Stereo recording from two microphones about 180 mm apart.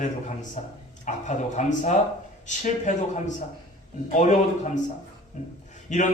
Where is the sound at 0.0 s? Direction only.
40° left (ahead or behind).